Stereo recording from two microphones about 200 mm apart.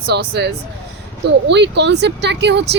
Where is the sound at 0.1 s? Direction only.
55° right (ahead or behind).